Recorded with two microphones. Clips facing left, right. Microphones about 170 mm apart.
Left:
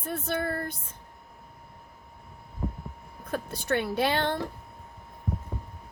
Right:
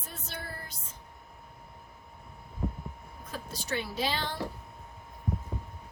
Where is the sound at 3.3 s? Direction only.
55° left (ahead or behind).